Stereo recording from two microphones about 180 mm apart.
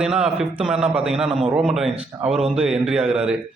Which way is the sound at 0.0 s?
5° right (ahead or behind).